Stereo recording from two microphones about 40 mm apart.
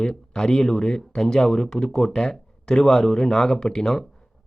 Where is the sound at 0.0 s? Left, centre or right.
Centre.